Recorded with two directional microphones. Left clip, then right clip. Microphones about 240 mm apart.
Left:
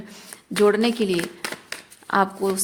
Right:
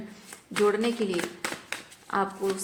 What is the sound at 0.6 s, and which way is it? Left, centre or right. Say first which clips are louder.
Speech: left 6 dB; left.